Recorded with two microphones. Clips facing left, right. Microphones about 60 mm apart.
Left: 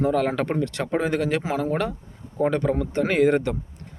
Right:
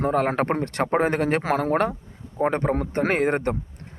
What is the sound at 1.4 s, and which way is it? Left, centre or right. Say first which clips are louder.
Speech: right 3 dB; right.